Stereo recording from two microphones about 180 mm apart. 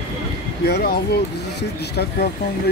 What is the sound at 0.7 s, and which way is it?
Speech, 65° left (ahead or behind).